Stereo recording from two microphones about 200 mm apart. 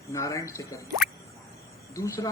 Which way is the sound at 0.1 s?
15° left (ahead or behind).